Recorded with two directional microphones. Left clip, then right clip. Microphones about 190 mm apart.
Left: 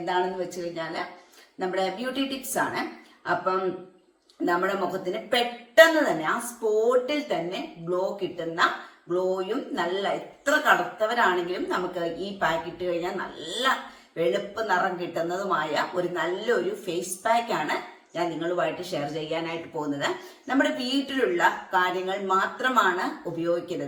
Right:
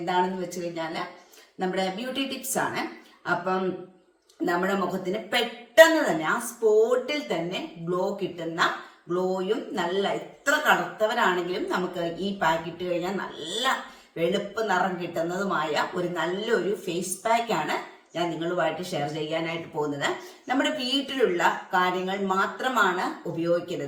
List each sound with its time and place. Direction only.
0.7 s speech: centre (ahead or behind)